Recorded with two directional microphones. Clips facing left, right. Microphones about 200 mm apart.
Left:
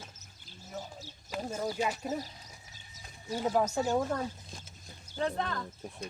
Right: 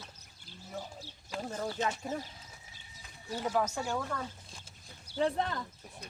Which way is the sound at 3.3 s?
20° left (ahead or behind).